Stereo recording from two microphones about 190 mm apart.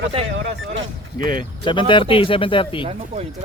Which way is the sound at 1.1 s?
45° right (ahead or behind).